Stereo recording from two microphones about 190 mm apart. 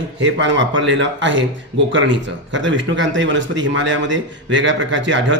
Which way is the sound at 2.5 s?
75° right (ahead or behind).